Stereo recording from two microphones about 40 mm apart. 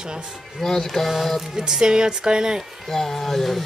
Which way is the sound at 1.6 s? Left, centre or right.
Centre.